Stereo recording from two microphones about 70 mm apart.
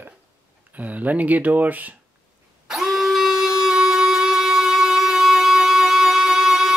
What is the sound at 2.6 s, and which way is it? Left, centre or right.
Music, centre.